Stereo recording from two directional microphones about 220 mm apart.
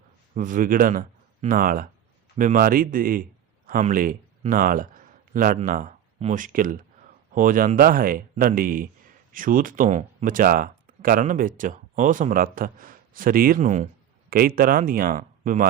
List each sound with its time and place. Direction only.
0.3 s a man's voice: 35° right (ahead or behind)